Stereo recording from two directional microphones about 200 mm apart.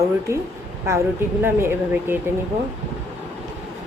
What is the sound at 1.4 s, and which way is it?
Dishes, 10° right (ahead or behind).